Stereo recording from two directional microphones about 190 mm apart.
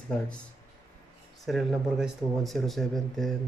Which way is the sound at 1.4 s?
Centre (ahead or behind).